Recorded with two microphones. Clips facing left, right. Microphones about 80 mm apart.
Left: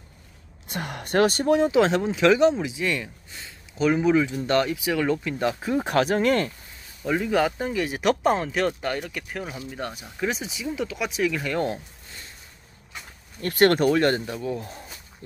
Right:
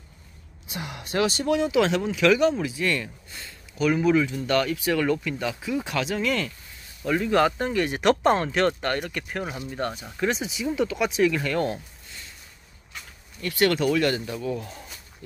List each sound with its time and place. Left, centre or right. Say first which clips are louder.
0.7 s speech: left 4 dB; left
4.7 s speech: even; centre
5.4 s speech: left 4 dB; left
7.0 s speech: right 1 dB; centre
9.4 s speech: right 2 dB; centre
9.7 s speech: right 3 dB; centre
11.4 s speech: even; centre
13.4 s speech: left 4 dB; left
13.8 s speech: left 2 dB; left
14.3 s speech: even; centre